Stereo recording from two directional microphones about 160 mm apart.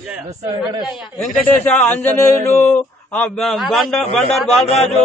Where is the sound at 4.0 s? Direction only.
40° left (ahead or behind).